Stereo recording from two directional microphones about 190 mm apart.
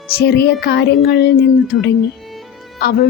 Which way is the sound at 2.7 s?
55° left (ahead or behind).